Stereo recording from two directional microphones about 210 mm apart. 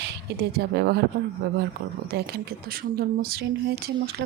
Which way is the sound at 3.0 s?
50° right (ahead or behind).